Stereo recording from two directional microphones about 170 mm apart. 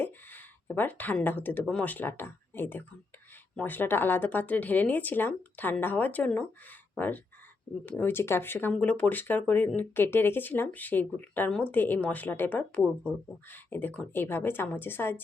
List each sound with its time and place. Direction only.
0.0 s a woman's voice: 10° left (ahead or behind)